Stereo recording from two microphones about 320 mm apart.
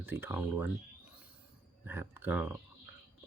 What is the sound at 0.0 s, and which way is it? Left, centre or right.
Speech, centre.